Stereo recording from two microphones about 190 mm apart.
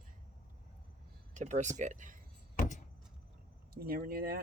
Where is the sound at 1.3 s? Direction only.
40° right (ahead or behind).